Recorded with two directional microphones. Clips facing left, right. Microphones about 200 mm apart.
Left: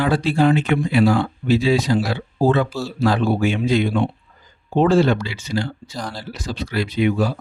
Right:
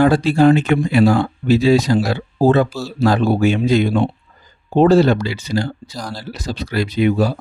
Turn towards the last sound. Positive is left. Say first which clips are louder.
# right 3 dB
turn(degrees=-40)  # may be behind; listen again after turning